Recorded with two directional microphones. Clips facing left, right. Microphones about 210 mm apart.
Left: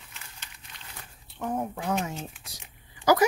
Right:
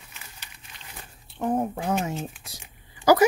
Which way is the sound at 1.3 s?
30° right (ahead or behind).